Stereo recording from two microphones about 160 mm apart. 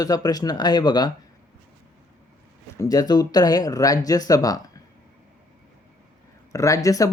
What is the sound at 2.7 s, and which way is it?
Speech, 20° left (ahead or behind).